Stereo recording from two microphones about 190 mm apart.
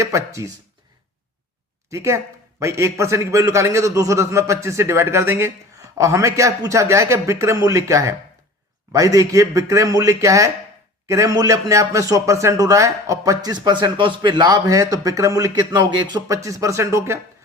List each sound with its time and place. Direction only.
0.0 s speech: 15° right (ahead or behind)
1.9 s speech: 15° right (ahead or behind)